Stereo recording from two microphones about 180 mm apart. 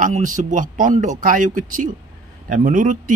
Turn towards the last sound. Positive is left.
turn(degrees=-45)  # may be behind; listen again after turning